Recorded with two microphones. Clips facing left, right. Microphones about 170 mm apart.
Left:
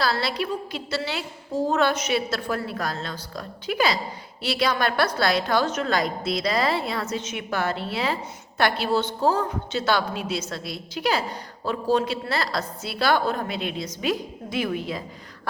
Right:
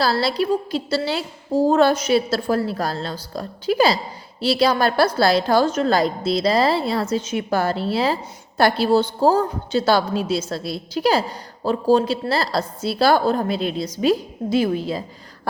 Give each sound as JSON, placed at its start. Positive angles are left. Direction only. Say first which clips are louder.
{"t": 0.0, "sound": "a woman's voice", "louder": "right 5 dB", "side_deg": -35}